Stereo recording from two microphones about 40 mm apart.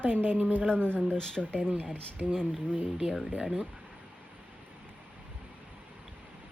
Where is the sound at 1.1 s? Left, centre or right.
Left.